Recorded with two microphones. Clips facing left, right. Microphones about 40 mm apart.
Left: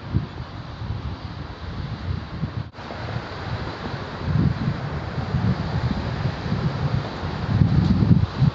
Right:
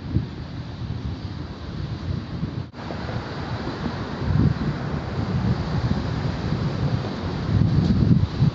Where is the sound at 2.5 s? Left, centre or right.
Centre.